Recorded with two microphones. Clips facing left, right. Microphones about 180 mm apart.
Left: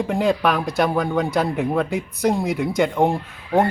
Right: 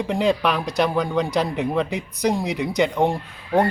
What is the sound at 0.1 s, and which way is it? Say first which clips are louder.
Speech: even; 5° left (ahead or behind).